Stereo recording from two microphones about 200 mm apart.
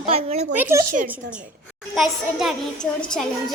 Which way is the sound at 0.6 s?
15° right (ahead or behind).